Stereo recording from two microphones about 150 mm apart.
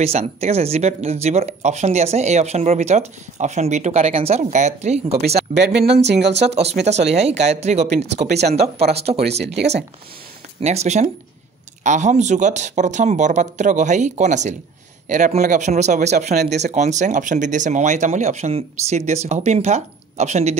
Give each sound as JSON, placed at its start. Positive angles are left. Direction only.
{"t": 0.0, "sound": "speech", "side_deg": -45}
{"t": 5.5, "sound": "speech", "side_deg": -60}
{"t": 5.9, "sound": "speech", "side_deg": -45}